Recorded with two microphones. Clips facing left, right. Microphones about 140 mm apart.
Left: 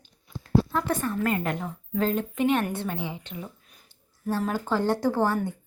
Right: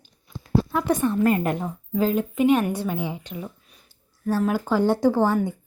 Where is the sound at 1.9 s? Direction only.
5° right (ahead or behind).